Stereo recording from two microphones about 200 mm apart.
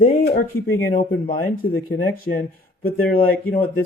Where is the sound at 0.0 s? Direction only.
40° left (ahead or behind).